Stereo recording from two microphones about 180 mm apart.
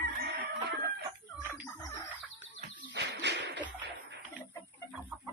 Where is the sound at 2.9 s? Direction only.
75° right (ahead or behind).